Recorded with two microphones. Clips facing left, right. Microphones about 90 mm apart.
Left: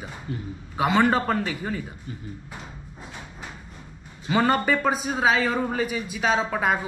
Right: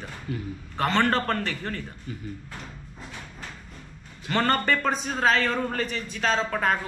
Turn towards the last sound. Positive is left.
turn(degrees=10)  # may be behind; listen again after turning